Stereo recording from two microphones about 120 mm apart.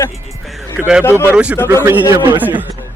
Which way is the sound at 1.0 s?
20° left (ahead or behind).